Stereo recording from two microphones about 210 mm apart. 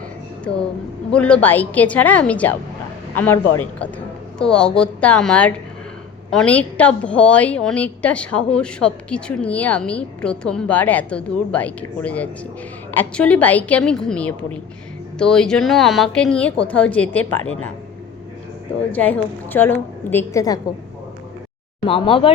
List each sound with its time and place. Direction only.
1.1 s a woman's voice: 5° left (ahead or behind)
18.9 s a woman's voice: 5° left (ahead or behind)
21.8 s speech: 25° left (ahead or behind)